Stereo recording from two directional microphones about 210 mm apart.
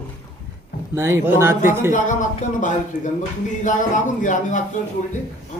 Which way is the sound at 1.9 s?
35° left (ahead or behind).